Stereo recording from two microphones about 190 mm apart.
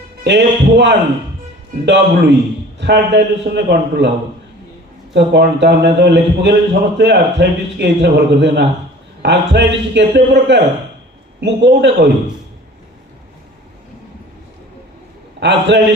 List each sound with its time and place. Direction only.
0.3 s a man's voice: 65° right (ahead or behind)
5.1 s a man's voice: 65° right (ahead or behind)
15.4 s a man's voice: 65° right (ahead or behind)